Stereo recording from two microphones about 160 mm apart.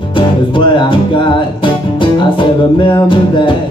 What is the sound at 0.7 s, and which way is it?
Music, 30° left (ahead or behind).